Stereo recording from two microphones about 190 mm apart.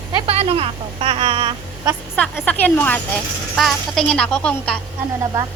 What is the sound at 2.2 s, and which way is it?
Speech, 10° left (ahead or behind).